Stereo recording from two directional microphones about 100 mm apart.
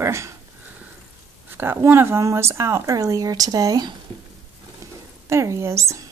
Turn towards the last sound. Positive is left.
turn(degrees=-30)  # may be behind; listen again after turning